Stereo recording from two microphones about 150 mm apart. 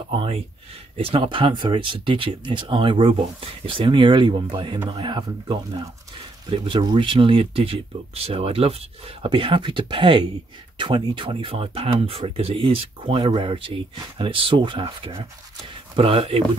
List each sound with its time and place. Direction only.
0.1 s speech: 40° right (ahead or behind)